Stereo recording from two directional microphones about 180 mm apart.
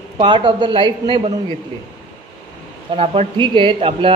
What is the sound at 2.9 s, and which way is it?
A woman's voice, 30° right (ahead or behind).